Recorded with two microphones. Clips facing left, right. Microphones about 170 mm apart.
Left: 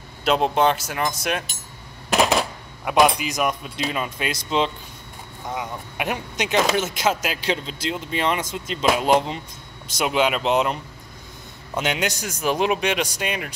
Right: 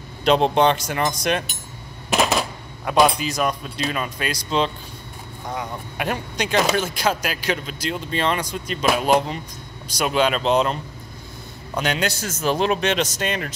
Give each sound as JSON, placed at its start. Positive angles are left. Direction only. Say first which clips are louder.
{"t": 0.2, "sound": "speech", "louder": "right 2 dB", "side_deg": 5}
{"t": 2.1, "sound": "a sound", "louder": "left 1 dB", "side_deg": 0}
{"t": 2.8, "sound": "a man's voice", "louder": "even", "side_deg": 15}